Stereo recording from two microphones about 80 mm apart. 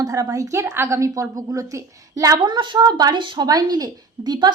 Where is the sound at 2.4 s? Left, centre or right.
Right.